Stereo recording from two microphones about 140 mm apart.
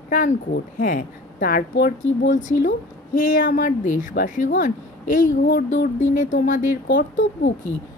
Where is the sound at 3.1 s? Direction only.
70° left (ahead or behind).